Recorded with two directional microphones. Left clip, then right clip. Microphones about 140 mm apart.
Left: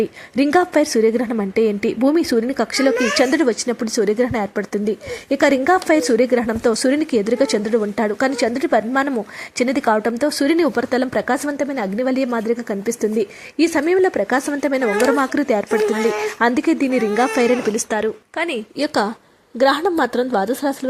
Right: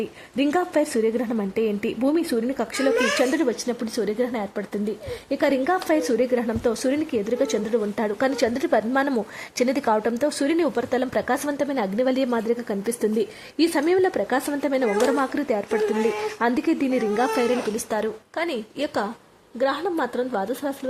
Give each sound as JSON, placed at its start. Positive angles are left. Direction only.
{"t": 0.3, "sound": "a woman's voice", "side_deg": 30}
{"t": 18.8, "sound": "a woman's voice", "side_deg": 50}